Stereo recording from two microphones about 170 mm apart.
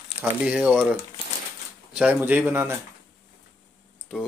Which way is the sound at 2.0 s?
10° right (ahead or behind).